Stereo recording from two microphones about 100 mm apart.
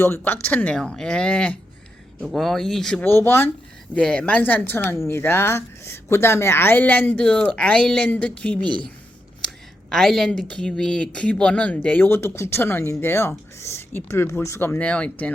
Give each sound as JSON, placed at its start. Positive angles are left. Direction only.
{"t": 0.0, "sound": "speech", "side_deg": 25}
{"t": 3.0, "sound": "speech", "side_deg": 25}
{"t": 3.9, "sound": "speech", "side_deg": 10}
{"t": 9.9, "sound": "speech", "side_deg": 5}
{"t": 14.8, "sound": "speech", "side_deg": 10}